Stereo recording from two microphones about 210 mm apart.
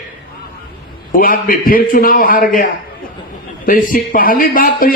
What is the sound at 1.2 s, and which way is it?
A man's voice, 40° left (ahead or behind).